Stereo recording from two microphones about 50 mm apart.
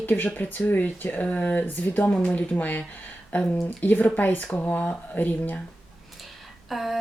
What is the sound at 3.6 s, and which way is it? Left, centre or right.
Speech, left.